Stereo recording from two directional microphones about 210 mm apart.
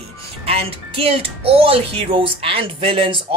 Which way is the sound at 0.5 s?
30° right (ahead or behind).